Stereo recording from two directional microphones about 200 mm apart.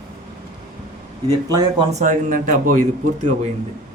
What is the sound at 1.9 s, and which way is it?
Speech, 40° right (ahead or behind).